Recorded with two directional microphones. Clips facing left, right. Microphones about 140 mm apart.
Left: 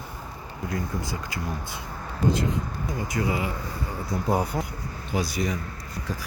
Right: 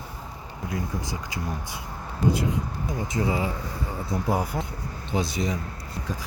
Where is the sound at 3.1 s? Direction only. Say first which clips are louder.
Right 1 dB; 25° right (ahead or behind).